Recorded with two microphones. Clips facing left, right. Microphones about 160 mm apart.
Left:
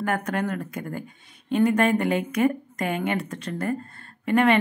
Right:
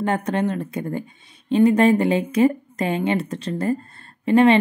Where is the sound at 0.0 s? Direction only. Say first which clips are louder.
Right 4 dB; 25° right (ahead or behind).